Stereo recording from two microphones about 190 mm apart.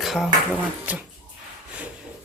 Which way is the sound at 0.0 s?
Centre (ahead or behind).